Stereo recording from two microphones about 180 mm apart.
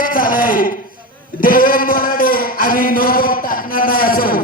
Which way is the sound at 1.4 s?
50° left (ahead or behind).